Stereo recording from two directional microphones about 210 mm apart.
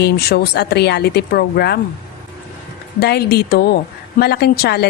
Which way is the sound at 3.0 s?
50° left (ahead or behind).